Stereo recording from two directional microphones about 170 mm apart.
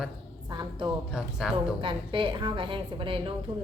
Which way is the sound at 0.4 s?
25° right (ahead or behind).